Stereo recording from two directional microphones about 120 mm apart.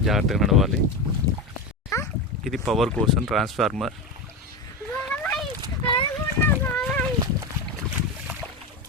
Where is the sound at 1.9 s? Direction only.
30° left (ahead or behind).